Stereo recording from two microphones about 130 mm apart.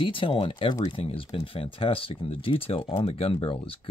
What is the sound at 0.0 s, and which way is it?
Speech, 40° left (ahead or behind).